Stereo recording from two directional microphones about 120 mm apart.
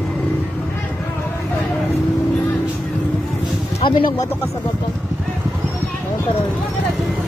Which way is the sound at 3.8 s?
45° left (ahead or behind).